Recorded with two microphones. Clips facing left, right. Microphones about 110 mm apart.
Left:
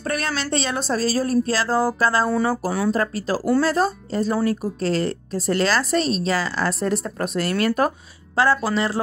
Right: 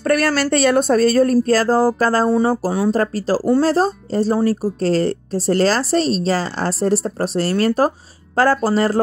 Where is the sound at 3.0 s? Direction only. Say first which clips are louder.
Right 5 dB; 40° right (ahead or behind).